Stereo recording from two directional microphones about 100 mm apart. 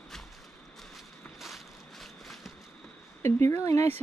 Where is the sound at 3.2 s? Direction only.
25° left (ahead or behind).